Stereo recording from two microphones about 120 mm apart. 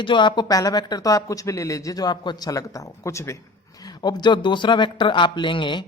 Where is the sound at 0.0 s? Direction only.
40° left (ahead or behind); by 3.3 s 25° left (ahead or behind).